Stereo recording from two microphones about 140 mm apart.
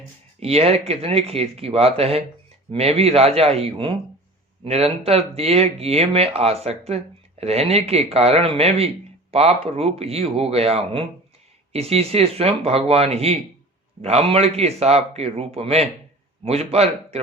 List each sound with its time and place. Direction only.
0.3 s speech: 45° right (ahead or behind)